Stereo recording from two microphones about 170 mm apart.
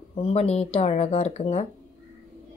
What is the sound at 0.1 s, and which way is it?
Speech, 40° left (ahead or behind).